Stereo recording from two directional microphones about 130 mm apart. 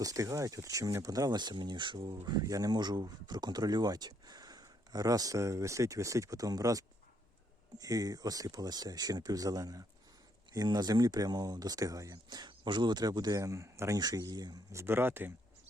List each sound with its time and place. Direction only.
0.0 s speech: 25° right (ahead or behind)